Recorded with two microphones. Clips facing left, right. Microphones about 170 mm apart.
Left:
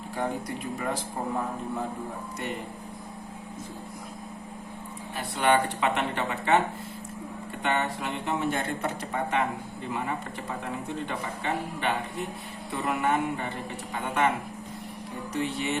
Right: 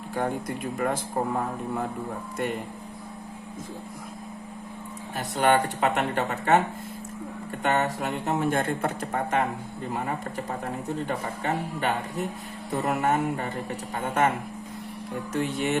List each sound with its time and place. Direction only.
0.2 s speech: 50° right (ahead or behind)
5.1 s speech: 45° right (ahead or behind)
7.6 s speech: 45° right (ahead or behind)
10.8 s speech: 40° right (ahead or behind)